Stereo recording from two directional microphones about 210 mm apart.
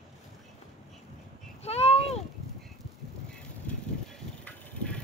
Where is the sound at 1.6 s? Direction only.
30° left (ahead or behind).